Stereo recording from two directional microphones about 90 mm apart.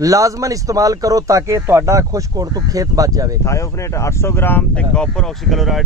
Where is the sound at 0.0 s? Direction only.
40° right (ahead or behind).